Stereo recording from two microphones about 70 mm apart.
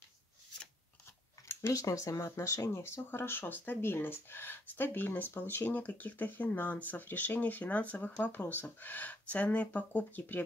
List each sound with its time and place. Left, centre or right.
1.7 s speech: left